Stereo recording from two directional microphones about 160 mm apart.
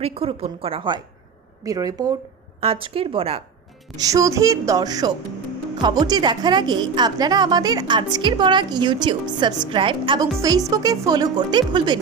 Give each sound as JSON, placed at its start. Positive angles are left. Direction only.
{"t": 0.0, "sound": "a woman's voice", "side_deg": -35}
{"t": 2.6, "sound": "a woman's voice", "side_deg": -35}
{"t": 3.9, "sound": "a woman's voice", "side_deg": -20}